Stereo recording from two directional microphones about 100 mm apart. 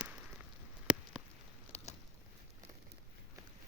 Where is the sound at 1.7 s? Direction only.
90° left.